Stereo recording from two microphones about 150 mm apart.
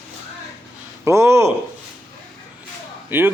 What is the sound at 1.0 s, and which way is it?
Speech, 20° right (ahead or behind).